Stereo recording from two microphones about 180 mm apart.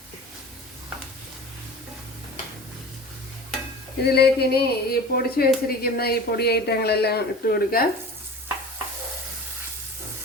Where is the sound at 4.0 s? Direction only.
65° left (ahead or behind).